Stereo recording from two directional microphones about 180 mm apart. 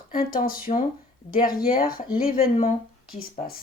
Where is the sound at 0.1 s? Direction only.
50° left (ahead or behind).